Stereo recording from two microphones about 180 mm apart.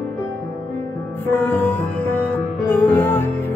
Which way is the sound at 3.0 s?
10° left (ahead or behind).